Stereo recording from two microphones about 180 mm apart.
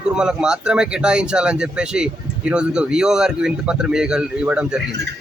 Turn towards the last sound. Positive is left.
turn(degrees=-5)  # may be behind; listen again after turning